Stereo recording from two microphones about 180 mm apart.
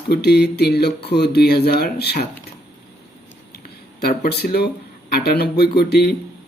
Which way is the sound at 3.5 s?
60° left (ahead or behind).